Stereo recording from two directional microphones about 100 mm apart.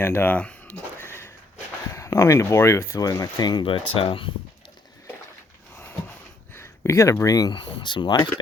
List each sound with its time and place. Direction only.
0.0 s speech: 20° left (ahead or behind)
0.9 s a sound: 25° left (ahead or behind)
1.9 s speech: 30° left (ahead or behind); by 4.3 s 65° left (ahead or behind)
6.5 s speech: 25° left (ahead or behind)
7.5 s speech: 55° left (ahead or behind)